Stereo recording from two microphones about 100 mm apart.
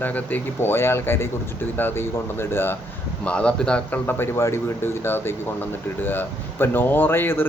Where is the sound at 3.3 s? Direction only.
10° left (ahead or behind).